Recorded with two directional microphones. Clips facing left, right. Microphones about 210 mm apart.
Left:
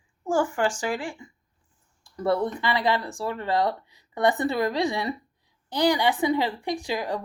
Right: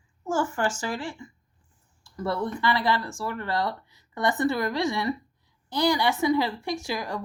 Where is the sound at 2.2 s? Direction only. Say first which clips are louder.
Left 2 dB; 20° left (ahead or behind).